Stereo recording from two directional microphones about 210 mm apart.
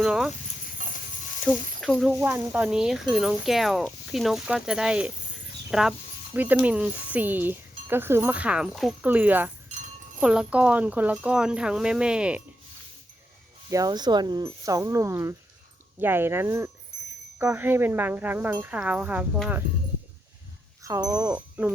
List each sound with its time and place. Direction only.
0.0 s speech: 5° right (ahead or behind)
1.5 s speech: centre (ahead or behind)
13.7 s speech: 15° right (ahead or behind)
20.8 s speech: 15° right (ahead or behind)